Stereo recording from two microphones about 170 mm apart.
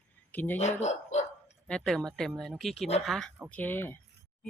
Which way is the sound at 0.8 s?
40° left (ahead or behind).